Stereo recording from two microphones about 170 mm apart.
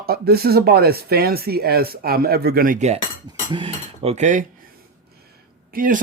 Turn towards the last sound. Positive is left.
turn(degrees=-55)  # may be behind; listen again after turning